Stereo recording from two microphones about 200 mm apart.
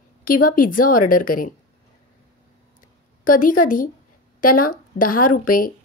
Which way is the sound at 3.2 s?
45° left (ahead or behind).